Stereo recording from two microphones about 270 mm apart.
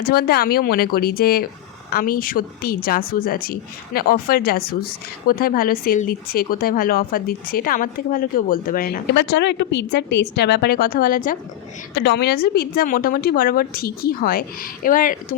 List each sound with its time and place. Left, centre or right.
0.0 s speech: left